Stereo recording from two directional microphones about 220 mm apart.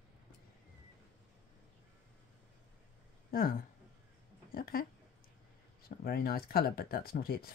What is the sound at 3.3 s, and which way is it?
Speech, 40° left (ahead or behind).